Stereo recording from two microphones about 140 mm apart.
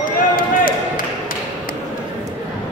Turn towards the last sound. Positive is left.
turn(degrees=90)